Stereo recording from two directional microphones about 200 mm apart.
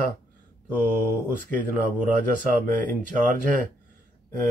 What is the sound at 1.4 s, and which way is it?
Speech, 40° right (ahead or behind).